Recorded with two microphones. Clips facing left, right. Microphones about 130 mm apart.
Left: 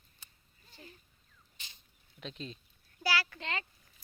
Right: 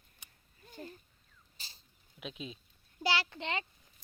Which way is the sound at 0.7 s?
45° right (ahead or behind).